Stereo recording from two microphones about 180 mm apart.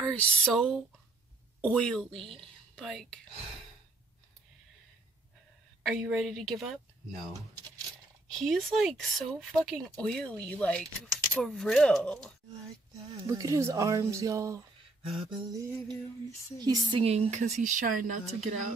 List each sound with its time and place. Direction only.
0.0 s speech: 5° left (ahead or behind)
5.9 s speech: centre (ahead or behind)
8.3 s speech: centre (ahead or behind)
13.1 s speech: 20° right (ahead or behind)
15.0 s music: 25° right (ahead or behind)
16.9 s speech: 35° right (ahead or behind)